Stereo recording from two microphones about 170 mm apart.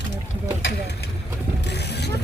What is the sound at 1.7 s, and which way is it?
Pulleys, 75° left (ahead or behind).